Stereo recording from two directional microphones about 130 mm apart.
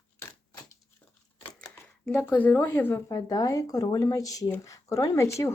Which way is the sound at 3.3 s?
30° left (ahead or behind).